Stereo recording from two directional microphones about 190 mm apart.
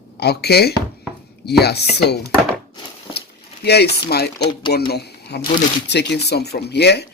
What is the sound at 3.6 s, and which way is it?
Speech, 60° left (ahead or behind).